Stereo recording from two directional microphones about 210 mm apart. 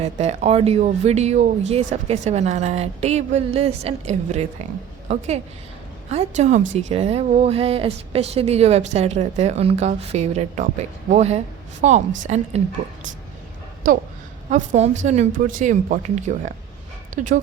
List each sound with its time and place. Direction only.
0.0 s speech: 30° right (ahead or behind)
13.8 s speech: 40° right (ahead or behind)